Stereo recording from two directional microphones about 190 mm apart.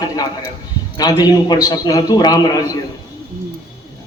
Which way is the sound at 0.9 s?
20° left (ahead or behind).